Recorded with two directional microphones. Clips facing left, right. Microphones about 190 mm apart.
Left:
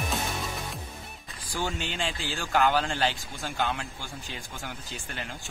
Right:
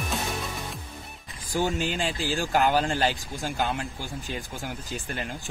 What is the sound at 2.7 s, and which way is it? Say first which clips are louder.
Speech: right 3 dB; 40° right (ahead or behind).